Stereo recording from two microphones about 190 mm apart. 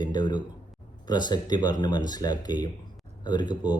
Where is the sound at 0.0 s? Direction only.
25° left (ahead or behind).